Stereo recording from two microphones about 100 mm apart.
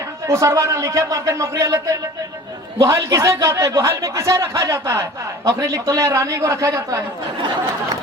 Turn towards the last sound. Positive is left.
turn(degrees=-35)  # may be behind; listen again after turning